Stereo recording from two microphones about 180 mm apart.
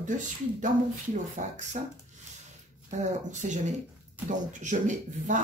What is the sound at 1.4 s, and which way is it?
Speech, 45° right (ahead or behind).